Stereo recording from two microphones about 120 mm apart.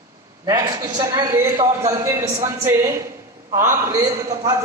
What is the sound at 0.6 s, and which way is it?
A man's voice, 35° right (ahead or behind).